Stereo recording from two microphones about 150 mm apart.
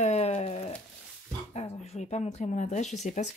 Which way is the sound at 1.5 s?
45° left (ahead or behind).